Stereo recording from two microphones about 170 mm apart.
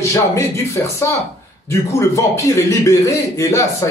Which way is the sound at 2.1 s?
20° left (ahead or behind).